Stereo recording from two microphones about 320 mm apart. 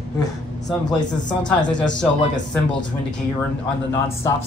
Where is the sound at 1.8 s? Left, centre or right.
Left.